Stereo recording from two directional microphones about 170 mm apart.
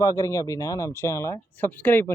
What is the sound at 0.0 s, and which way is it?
Speech, 20° left (ahead or behind).